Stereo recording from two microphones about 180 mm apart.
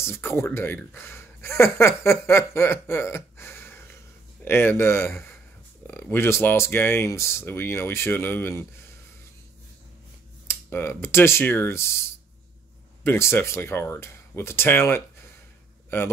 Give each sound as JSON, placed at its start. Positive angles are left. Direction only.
{"t": 0.0, "sound": "speech", "side_deg": 15}
{"t": 10.4, "sound": "speech", "side_deg": 15}